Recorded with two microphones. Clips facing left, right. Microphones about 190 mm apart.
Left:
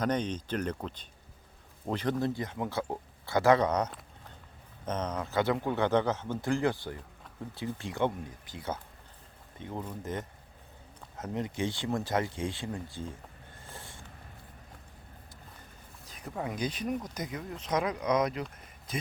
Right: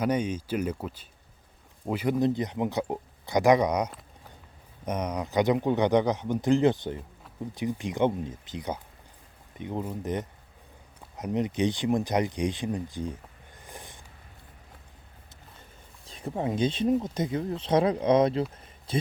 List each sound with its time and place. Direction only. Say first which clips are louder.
0.0 s speech: right 3 dB; 10° right (ahead or behind)
13.6 s vehicle: right 3 dB; 15° right (ahead or behind)
16.0 s speech: right 6 dB; 30° right (ahead or behind)